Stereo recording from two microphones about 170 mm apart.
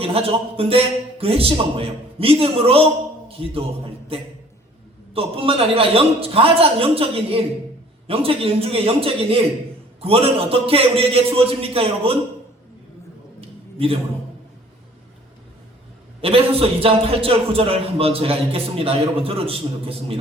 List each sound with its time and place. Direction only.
0.0 s a man's voice: 35° right (ahead or behind)
5.1 s a man's voice: 35° right (ahead or behind)
16.2 s a man's voice: 35° right (ahead or behind)